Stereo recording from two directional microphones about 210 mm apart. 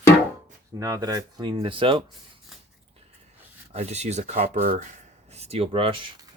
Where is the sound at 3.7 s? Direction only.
30° right (ahead or behind).